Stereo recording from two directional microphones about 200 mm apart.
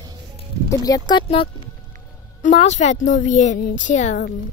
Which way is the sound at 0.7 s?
20° left (ahead or behind).